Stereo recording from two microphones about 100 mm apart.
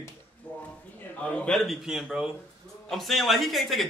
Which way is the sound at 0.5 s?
15° left (ahead or behind).